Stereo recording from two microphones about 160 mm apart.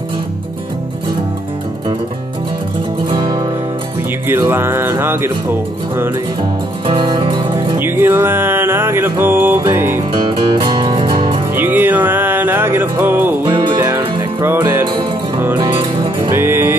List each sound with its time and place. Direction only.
3.1 s music: 30° right (ahead or behind)
4.3 s music: 15° right (ahead or behind)
6.9 s music: 30° right (ahead or behind)
7.8 s music: 15° right (ahead or behind)
10.1 s music: 30° right (ahead or behind)
11.5 s music: 15° right (ahead or behind)
13.5 s music: 30° right (ahead or behind)
13.8 s music: 15° right (ahead or behind)
15.5 s music: 30° right (ahead or behind)
16.3 s music: 15° right (ahead or behind)